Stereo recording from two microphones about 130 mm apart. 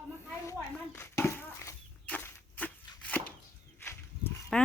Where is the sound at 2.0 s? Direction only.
10° left (ahead or behind).